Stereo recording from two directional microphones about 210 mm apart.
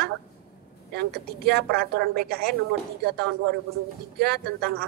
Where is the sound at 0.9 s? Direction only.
50° right (ahead or behind).